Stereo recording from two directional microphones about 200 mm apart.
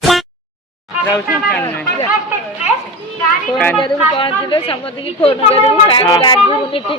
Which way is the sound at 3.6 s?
5° left (ahead or behind).